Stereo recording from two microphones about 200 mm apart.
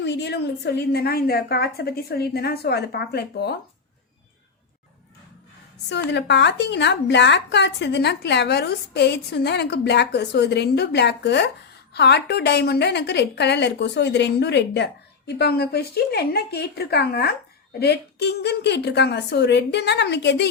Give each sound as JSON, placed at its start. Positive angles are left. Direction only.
{"t": 0.0, "sound": "a woman's voice", "side_deg": 60}
{"t": 5.9, "sound": "a woman's voice", "side_deg": 60}